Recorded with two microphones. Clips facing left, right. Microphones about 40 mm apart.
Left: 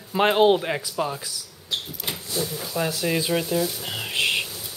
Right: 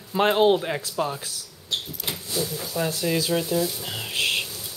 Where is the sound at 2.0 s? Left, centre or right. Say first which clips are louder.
Even; centre.